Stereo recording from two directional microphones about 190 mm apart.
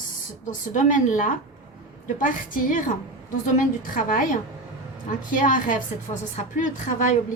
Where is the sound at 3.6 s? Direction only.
45° left (ahead or behind).